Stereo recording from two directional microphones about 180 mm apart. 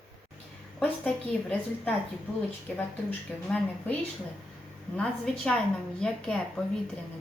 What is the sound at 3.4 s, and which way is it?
Speech, 5° left (ahead or behind).